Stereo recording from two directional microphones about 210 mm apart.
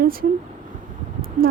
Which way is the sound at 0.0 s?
45° right (ahead or behind).